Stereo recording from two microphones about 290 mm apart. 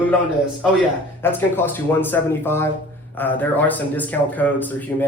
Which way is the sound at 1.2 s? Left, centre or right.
Centre.